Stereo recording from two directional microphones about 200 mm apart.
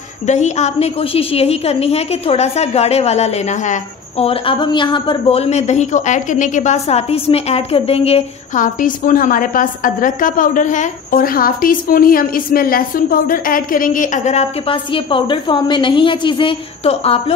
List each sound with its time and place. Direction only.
0.3 s a woman's voice: 35° left (ahead or behind)